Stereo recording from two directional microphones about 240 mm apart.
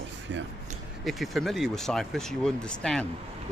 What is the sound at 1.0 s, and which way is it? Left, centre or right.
Speech, centre.